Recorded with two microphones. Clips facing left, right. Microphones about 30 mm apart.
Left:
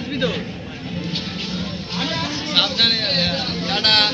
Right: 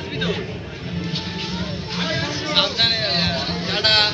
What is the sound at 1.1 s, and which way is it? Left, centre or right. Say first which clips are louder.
Vehicle: left 1 dB; left.